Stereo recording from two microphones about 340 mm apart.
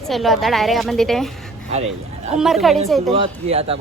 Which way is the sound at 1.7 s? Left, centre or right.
Centre.